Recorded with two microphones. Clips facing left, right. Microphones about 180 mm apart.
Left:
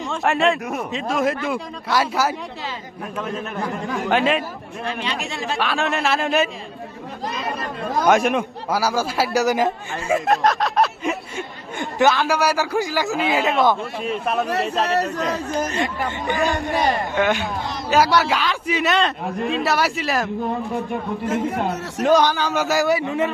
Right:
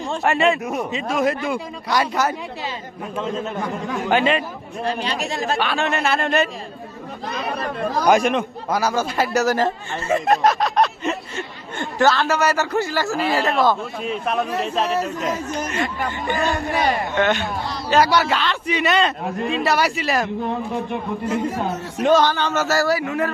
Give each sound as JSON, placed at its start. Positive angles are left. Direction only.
{"t": 0.2, "sound": "a man's voice", "side_deg": 0}
{"t": 3.2, "sound": "a man's voice", "side_deg": -25}
{"t": 3.6, "sound": "a man's voice", "side_deg": 0}
{"t": 4.8, "sound": "speech", "side_deg": -35}
{"t": 5.5, "sound": "a man's voice", "side_deg": 0}
{"t": 8.0, "sound": "a man's voice", "side_deg": 0}
{"t": 9.6, "sound": "speech", "side_deg": 0}
{"t": 11.8, "sound": "a man's voice", "side_deg": 15}
{"t": 13.4, "sound": "a man's voice", "side_deg": 0}
{"t": 15.4, "sound": "speech", "side_deg": 35}
{"t": 16.2, "sound": "a man's voice", "side_deg": 15}
{"t": 22.1, "sound": "a man's voice", "side_deg": 15}